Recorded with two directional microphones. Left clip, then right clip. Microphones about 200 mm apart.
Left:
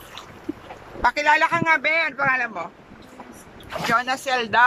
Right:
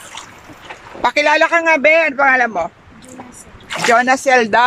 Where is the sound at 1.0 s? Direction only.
20° right (ahead or behind).